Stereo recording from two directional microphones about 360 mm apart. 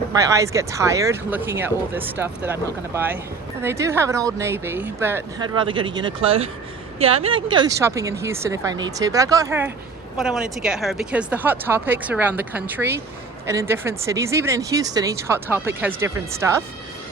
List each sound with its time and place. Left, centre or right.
0.2 s speech: centre